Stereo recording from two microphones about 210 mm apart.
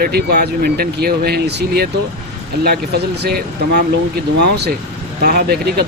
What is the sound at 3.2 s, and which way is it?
Speech, 50° right (ahead or behind).